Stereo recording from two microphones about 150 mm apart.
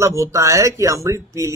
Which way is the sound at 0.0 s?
20° right (ahead or behind).